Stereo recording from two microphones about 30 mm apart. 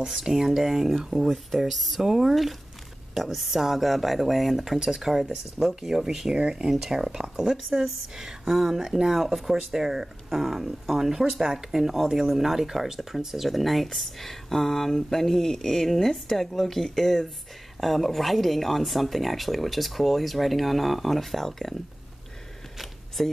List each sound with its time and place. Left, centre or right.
0.0 s speech: centre
6.3 s speech: right
6.8 s speech: centre
8.1 s speech: right
8.5 s speech: centre
9.1 s speech: centre
22.8 s a sound: centre